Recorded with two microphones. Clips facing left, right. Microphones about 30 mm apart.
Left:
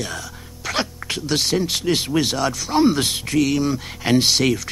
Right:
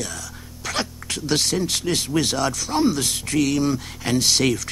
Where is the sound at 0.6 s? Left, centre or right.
Centre.